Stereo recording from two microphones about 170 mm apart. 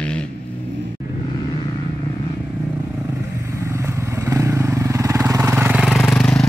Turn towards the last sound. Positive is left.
turn(degrees=5)  # may be behind; listen again after turning